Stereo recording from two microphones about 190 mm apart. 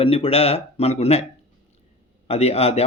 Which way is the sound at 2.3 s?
30° left (ahead or behind).